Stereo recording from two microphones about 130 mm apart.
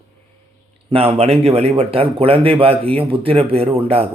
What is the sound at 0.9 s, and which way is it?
Speech, 50° right (ahead or behind).